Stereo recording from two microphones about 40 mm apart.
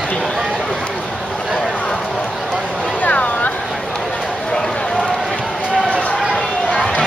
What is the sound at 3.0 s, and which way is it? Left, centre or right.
Vehicle, left.